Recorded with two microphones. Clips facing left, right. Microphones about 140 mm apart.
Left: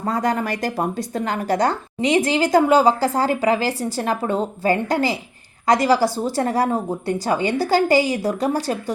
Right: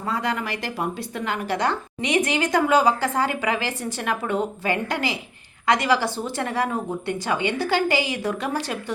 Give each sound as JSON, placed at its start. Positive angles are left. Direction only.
{"t": 0.0, "sound": "speech", "side_deg": 45}